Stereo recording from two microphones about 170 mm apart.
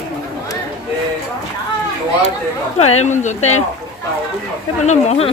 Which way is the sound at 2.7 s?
40° left (ahead or behind).